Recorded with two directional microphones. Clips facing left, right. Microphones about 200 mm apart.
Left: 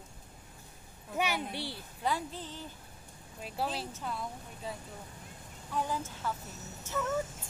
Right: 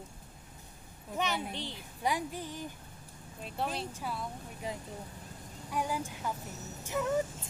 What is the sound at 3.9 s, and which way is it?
Speech, 10° right (ahead or behind).